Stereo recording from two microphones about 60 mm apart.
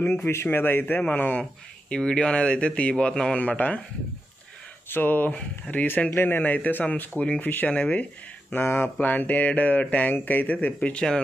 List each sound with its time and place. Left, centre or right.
0.3 s speech: left
1.9 s speech: centre
3.3 s speech: left
4.8 s speech: left